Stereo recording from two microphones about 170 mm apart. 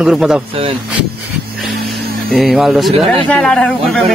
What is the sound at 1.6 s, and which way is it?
Speech, centre (ahead or behind).